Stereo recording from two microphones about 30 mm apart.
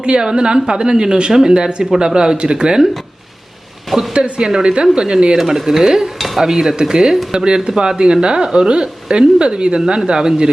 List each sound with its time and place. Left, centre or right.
0.0 s speech: right
4.1 s speech: right
5.4 s speech: centre
6.1 s stir: centre
6.4 s speech: centre